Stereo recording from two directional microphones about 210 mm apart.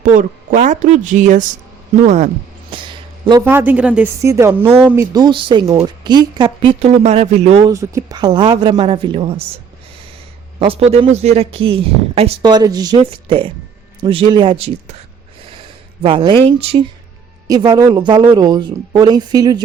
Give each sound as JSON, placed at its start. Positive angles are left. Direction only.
{"t": 0.0, "sound": "speech", "side_deg": -40}
{"t": 2.0, "sound": "a sound", "side_deg": -30}
{"t": 3.4, "sound": "speech", "side_deg": -10}
{"t": 7.7, "sound": "speech", "side_deg": -15}
{"t": 10.6, "sound": "speech", "side_deg": -25}
{"t": 16.0, "sound": "speech", "side_deg": -25}